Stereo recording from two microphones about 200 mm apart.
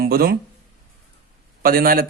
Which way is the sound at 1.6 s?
45° right (ahead or behind).